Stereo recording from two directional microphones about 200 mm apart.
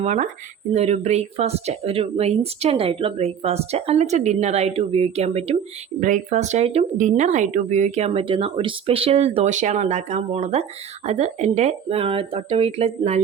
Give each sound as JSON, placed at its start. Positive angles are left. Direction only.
{"t": 0.0, "sound": "speech", "side_deg": -35}